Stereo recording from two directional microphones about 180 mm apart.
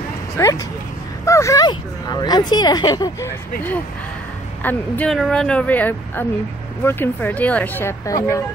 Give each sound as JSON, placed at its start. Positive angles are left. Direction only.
{"t": 0.4, "sound": "speech", "side_deg": 15}
{"t": 4.6, "sound": "speech", "side_deg": 5}